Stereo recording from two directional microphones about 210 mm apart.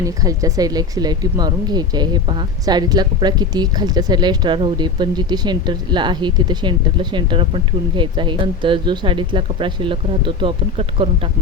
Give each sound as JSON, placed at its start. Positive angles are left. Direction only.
{"t": 0.0, "sound": "speech", "side_deg": -15}